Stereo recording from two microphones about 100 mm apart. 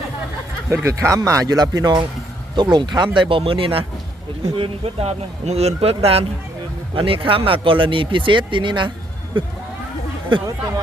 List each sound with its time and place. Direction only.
0.7 s speech: 25° right (ahead or behind); by 3.1 s 45° right (ahead or behind)
3.2 s a man's voice: 65° right (ahead or behind); by 6.2 s 80° right
6.9 s speech: 65° right (ahead or behind)